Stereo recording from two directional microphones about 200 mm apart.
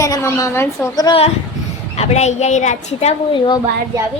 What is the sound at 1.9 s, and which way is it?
A woman's voice, 30° left (ahead or behind).